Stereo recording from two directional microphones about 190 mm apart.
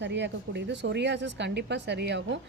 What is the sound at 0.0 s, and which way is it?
Speech, 65° right (ahead or behind).